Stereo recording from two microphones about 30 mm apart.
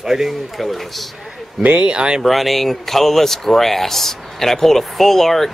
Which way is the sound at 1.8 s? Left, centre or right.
Right.